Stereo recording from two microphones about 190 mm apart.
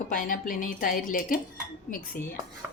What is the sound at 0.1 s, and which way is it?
Speech, 45° left (ahead or behind).